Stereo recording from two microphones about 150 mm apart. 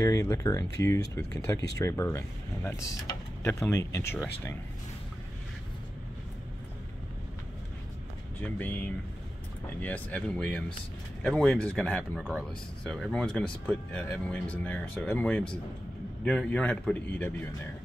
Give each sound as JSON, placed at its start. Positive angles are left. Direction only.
{"t": 0.0, "sound": "speech", "side_deg": 25}
{"t": 8.4, "sound": "speech", "side_deg": 10}